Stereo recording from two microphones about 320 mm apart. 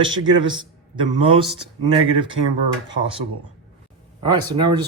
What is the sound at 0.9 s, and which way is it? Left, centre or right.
A man's voice, centre.